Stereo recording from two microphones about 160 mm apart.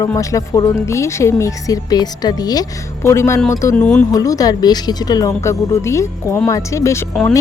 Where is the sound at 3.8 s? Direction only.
5° left (ahead or behind).